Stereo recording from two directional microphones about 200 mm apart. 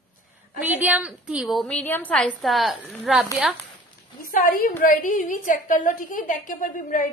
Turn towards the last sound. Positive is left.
turn(degrees=45)  # may be behind; listen again after turning